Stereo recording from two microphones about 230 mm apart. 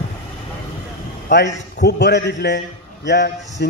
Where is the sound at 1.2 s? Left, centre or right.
Left.